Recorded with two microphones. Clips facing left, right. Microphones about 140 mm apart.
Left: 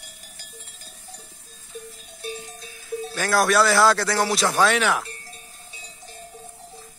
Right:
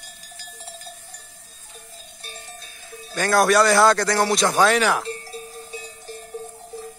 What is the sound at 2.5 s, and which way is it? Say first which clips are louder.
Cowbell: left 9 dB; 90° left.